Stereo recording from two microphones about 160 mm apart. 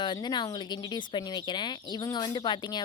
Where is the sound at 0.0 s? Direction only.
30° left (ahead or behind).